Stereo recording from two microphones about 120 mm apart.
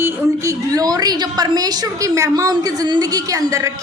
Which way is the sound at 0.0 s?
30° right (ahead or behind).